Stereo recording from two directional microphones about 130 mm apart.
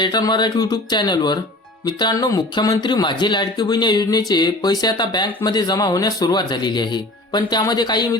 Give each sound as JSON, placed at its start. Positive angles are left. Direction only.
{"t": 0.0, "sound": "speech", "side_deg": 35}